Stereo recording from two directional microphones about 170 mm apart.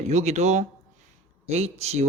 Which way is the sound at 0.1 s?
40° right (ahead or behind).